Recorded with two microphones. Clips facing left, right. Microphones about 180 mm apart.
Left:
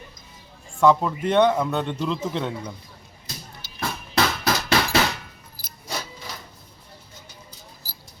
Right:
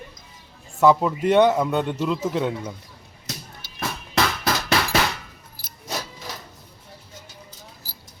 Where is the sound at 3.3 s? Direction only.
80° right.